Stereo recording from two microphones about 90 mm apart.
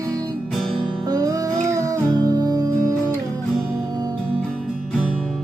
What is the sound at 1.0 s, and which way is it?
Music, 45° right (ahead or behind).